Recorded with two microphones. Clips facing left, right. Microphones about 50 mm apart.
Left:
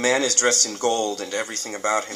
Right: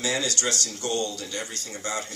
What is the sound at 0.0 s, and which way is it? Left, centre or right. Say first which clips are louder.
Speech: left 7 dB; left.